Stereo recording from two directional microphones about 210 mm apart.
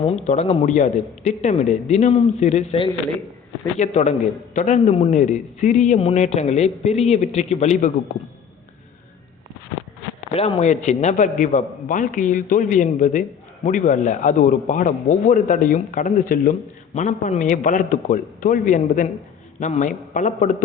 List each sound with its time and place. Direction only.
0.0 s a man's voice: 30° left (ahead or behind)
10.3 s a man's voice: 30° left (ahead or behind)